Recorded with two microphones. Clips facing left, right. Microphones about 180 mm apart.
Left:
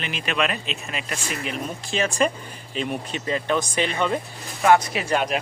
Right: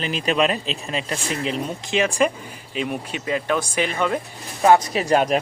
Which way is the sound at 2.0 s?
10° right (ahead or behind).